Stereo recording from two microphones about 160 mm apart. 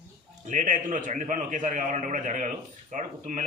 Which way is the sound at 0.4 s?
55° right (ahead or behind).